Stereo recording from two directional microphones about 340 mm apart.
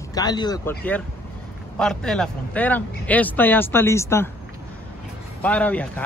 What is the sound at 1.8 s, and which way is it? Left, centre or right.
A man's voice, centre.